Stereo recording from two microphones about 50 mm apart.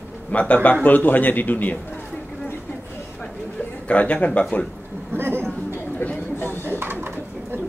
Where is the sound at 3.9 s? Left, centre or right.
Left.